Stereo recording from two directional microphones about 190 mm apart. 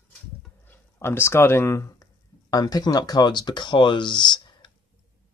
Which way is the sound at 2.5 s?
20° left (ahead or behind).